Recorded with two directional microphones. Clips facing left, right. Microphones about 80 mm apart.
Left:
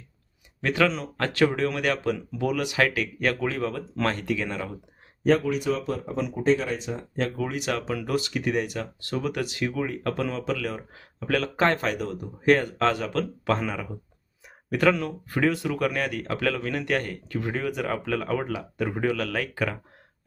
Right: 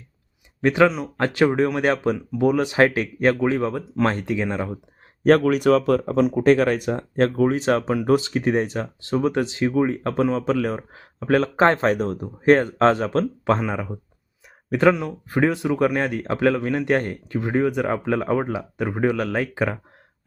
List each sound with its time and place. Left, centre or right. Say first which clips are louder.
0.6 s speech: right 6 dB; right
5.2 s speech: right 6 dB; right
7.3 s speech: right 11 dB; right